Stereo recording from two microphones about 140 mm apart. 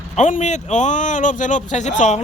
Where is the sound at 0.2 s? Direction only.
60° left (ahead or behind).